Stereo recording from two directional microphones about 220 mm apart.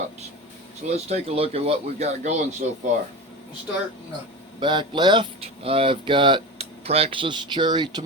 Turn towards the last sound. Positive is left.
turn(degrees=-20)  # may be behind; listen again after turning